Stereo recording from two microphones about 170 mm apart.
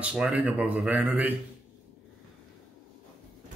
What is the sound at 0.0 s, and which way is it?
Speech, 5° right (ahead or behind).